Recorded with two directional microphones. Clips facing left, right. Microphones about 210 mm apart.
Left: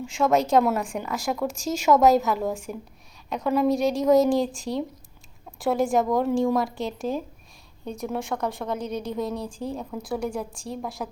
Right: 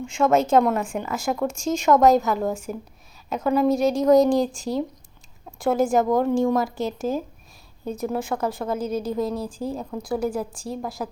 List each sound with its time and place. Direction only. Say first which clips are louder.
0.0 s a woman's voice: right 2 dB; centre (ahead or behind)